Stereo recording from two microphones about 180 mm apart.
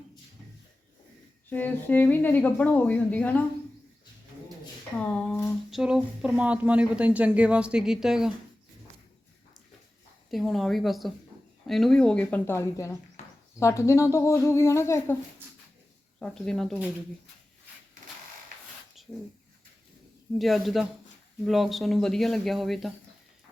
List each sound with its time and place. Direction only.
1.5 s speech: 10° left (ahead or behind)
4.9 s speech: 10° left (ahead or behind)
5.7 s speech: 5° right (ahead or behind)
10.2 s speech: centre (ahead or behind); by 13.0 s 15° left (ahead or behind)
13.2 s a sound: 40° left (ahead or behind)
13.6 s speech: 15° left (ahead or behind)
16.2 s speech: 5° left (ahead or behind)
19.0 s a sound: centre (ahead or behind)
20.4 s speech: centre (ahead or behind)